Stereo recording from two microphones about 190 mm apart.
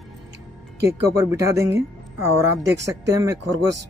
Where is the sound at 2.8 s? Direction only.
15° right (ahead or behind).